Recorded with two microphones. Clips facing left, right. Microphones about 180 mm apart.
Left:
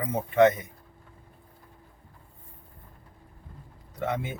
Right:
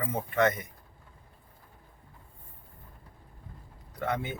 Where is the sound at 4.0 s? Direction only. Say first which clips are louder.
Left 2 dB; 10° left (ahead or behind).